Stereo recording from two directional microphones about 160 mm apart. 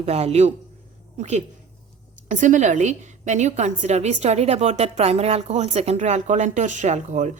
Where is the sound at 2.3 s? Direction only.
50° right (ahead or behind).